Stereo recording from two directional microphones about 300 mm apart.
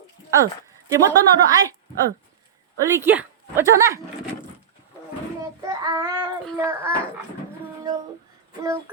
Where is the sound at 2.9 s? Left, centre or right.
Centre.